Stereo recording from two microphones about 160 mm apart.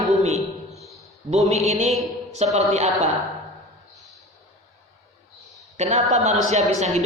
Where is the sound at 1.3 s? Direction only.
45° right (ahead or behind).